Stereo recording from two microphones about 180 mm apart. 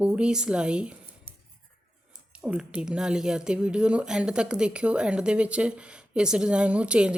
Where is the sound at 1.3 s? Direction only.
35° right (ahead or behind).